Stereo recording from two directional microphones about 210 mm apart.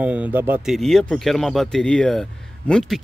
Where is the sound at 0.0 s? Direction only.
5° right (ahead or behind).